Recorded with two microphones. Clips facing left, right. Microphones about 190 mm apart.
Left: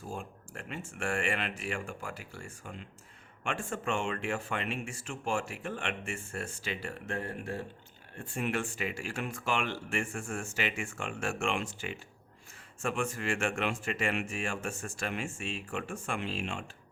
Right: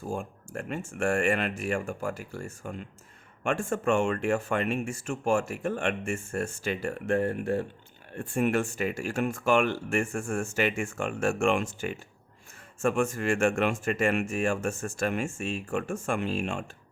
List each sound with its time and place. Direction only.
0.1 s speech: 45° right (ahead or behind)